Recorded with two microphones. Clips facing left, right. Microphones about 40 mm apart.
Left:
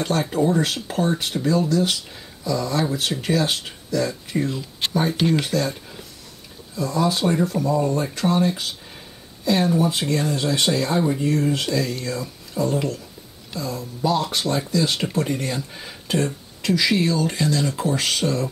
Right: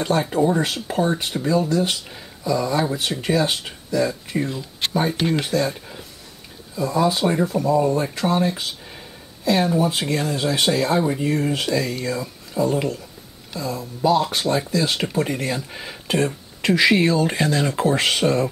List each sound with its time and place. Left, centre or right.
0.0 s speech: centre
15.7 s speech: centre
16.6 s speech: right